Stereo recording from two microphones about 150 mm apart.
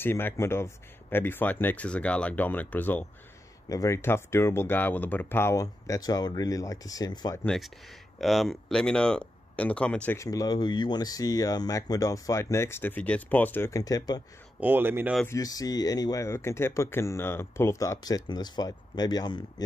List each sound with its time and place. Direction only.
0.0 s speech: 15° left (ahead or behind)
3.6 s speech: 20° left (ahead or behind)
7.4 s speech: centre (ahead or behind)
10.1 s speech: 20° left (ahead or behind)
14.6 s speech: 15° right (ahead or behind)
15.2 s speech: 25° left (ahead or behind)